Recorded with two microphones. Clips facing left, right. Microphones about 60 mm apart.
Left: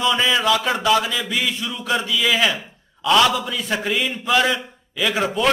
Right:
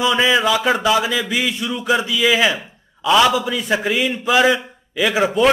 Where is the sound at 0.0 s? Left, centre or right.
Centre.